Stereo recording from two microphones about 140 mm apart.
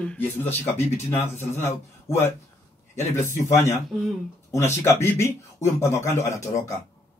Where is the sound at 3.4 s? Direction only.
20° left (ahead or behind).